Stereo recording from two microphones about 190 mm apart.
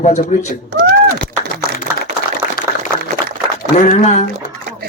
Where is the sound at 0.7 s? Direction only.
55° right (ahead or behind).